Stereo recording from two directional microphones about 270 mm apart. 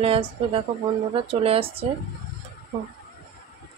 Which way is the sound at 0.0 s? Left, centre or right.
Right.